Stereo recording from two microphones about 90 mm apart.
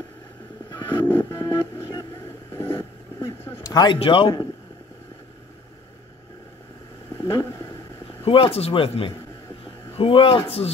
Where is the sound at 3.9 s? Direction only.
90° left.